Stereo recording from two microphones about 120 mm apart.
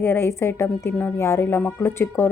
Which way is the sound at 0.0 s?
20° left (ahead or behind).